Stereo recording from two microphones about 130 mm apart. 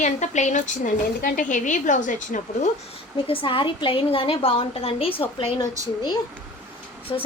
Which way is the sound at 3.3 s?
40° left (ahead or behind).